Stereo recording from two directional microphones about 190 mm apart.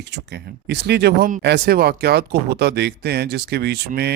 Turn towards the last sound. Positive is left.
turn(degrees=-55)  # may be behind; listen again after turning